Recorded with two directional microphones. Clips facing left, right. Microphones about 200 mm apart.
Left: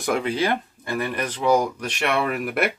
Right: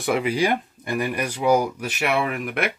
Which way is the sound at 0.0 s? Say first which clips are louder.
Right 1 dB; 5° right (ahead or behind).